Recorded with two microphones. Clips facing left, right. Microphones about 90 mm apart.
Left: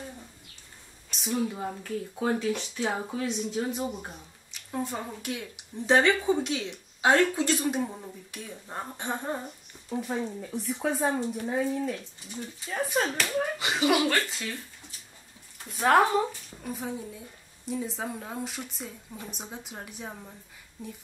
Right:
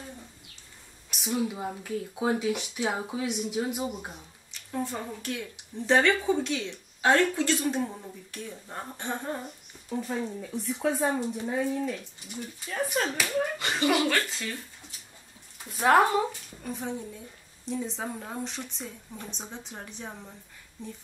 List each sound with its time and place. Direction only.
1.2 s speech: 10° right (ahead or behind)
4.8 s a woman's voice: 15° left (ahead or behind)
15.6 s a woman's voice: 5° right (ahead or behind)